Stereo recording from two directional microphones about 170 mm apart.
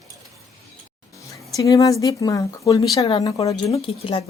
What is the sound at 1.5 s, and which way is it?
Speech, 20° left (ahead or behind).